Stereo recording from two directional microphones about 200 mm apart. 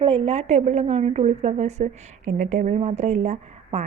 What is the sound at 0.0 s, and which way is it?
A woman's voice, 30° right (ahead or behind).